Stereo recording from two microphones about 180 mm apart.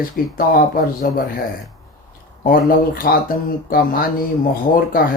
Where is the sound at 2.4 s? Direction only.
50° left (ahead or behind).